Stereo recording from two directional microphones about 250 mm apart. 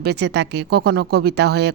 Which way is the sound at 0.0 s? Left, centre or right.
Right.